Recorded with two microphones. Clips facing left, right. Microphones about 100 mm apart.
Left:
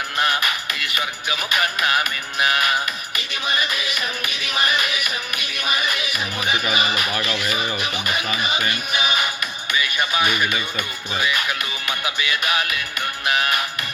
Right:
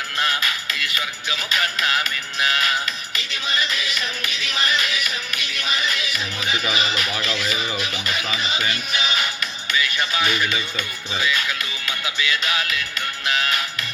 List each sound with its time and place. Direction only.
0.2 s music: 20° left (ahead or behind)
7.2 s speech: 15° left (ahead or behind)
8.7 s music: 15° left (ahead or behind)
9.7 s speech: 15° left (ahead or behind)
13.2 s music: 15° left (ahead or behind)